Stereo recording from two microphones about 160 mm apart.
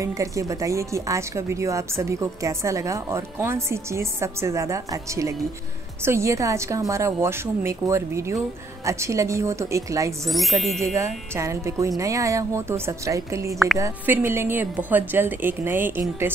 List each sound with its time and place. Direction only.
0.0 s a woman's voice: 20° right (ahead or behind)
10.2 s speech: centre (ahead or behind)
10.8 s a woman's voice: 20° right (ahead or behind)